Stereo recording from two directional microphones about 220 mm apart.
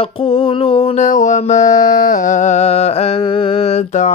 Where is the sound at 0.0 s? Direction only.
25° left (ahead or behind).